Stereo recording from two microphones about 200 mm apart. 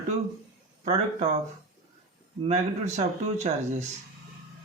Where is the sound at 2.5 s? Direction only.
35° right (ahead or behind).